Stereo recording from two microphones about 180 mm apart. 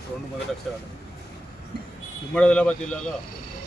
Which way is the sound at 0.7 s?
Centre (ahead or behind).